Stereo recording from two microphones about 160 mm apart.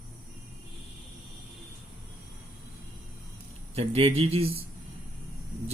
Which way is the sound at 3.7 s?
40° right (ahead or behind).